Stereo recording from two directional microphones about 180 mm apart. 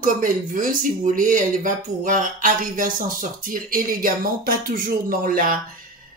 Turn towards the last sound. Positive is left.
turn(degrees=-55)  # may be behind; listen again after turning